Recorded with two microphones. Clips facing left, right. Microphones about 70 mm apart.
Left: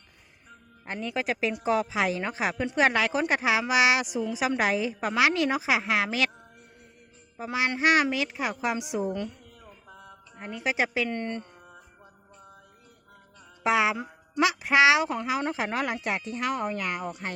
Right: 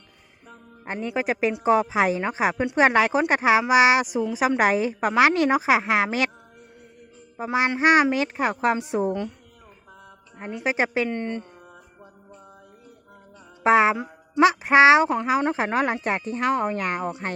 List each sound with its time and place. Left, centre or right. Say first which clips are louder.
0.9 s a woman's voice: right 4 dB; right
7.3 s a woman's voice: right 5 dB; right
10.3 s a woman's voice: right 3 dB; right
11.1 s speech: right 3 dB; centre
13.7 s a woman's voice: right 6 dB; right